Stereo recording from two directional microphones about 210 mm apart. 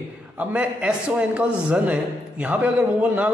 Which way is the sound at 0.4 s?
5° right (ahead or behind).